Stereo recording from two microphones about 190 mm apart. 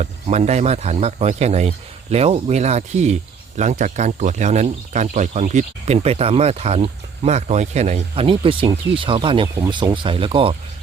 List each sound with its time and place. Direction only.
0.0 s speech: 35° right (ahead or behind)